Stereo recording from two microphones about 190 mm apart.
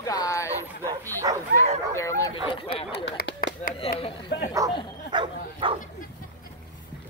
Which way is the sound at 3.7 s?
30° left (ahead or behind).